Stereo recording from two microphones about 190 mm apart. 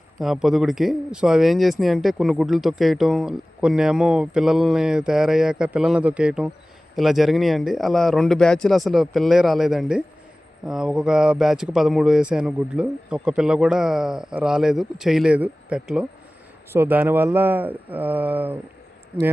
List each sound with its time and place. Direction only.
0.2 s speech: centre (ahead or behind)